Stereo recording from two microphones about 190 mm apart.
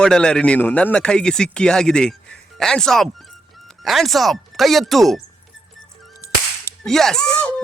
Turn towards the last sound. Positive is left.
turn(degrees=5)  # may be behind; listen again after turning